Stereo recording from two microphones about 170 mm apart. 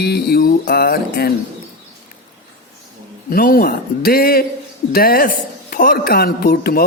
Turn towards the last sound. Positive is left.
turn(degrees=65)  # may be behind; listen again after turning